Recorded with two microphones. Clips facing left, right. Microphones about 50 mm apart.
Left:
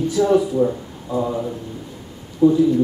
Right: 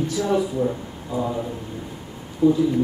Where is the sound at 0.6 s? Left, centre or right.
Centre.